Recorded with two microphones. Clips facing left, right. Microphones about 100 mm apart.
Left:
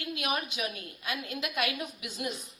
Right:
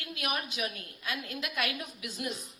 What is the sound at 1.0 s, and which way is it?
Speech, 25° left (ahead or behind).